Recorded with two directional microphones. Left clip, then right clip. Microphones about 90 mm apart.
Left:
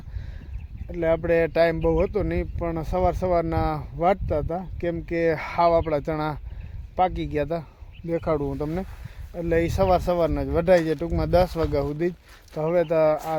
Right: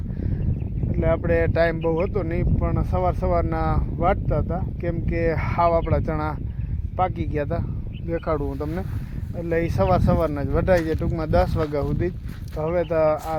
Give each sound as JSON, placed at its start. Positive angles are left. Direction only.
{"t": 0.9, "sound": "speech", "side_deg": 50}
{"t": 8.4, "sound": "speech", "side_deg": 25}
{"t": 9.4, "sound": "speech", "side_deg": 45}